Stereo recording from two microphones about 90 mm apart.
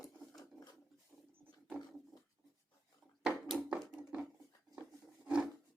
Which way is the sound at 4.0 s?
15° right (ahead or behind).